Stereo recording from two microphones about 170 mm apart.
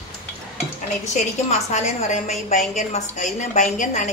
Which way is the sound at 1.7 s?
40° left (ahead or behind).